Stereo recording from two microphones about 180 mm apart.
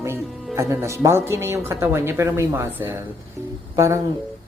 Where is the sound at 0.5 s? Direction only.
15° right (ahead or behind).